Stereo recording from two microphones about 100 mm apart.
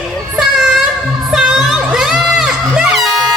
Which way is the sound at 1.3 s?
5° right (ahead or behind).